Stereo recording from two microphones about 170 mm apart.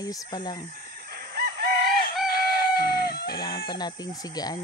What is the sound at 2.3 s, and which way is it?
Chicken, 65° left (ahead or behind).